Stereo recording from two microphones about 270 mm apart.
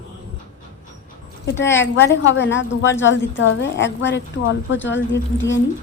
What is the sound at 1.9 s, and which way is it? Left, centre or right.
A woman's voice, left.